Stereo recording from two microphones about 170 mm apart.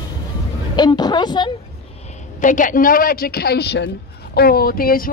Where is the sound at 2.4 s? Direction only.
50° left (ahead or behind); by 3.9 s 75° left (ahead or behind).